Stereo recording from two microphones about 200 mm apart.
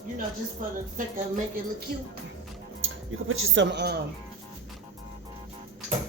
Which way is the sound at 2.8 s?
80° right.